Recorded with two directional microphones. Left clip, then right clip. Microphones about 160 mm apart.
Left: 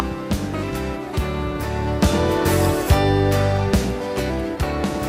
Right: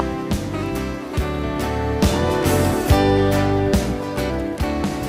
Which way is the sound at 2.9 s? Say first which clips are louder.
Right 2 dB; 35° left (ahead or behind).